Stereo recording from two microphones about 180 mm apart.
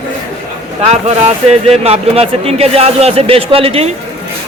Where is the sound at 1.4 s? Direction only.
35° right (ahead or behind).